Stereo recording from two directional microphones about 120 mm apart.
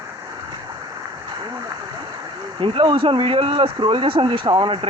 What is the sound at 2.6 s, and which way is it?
Speech, 45° right (ahead or behind).